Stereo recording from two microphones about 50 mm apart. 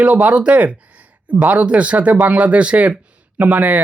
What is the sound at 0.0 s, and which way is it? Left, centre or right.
Speech, right.